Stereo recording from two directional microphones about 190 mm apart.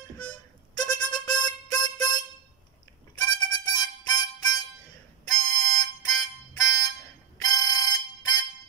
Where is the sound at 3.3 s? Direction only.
20° left (ahead or behind).